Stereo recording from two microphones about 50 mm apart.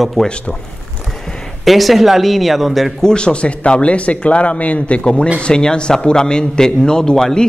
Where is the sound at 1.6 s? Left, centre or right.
Centre.